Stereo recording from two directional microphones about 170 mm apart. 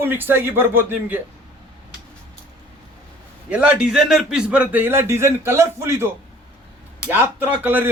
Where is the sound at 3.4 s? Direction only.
5° right (ahead or behind).